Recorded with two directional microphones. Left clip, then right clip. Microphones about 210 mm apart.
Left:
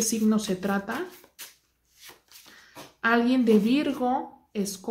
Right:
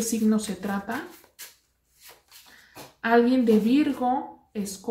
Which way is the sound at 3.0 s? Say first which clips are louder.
Right 2 dB; 50° left (ahead or behind).